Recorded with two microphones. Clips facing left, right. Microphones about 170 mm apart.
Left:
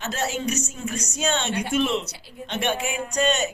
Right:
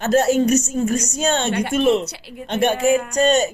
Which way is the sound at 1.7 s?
45° right (ahead or behind).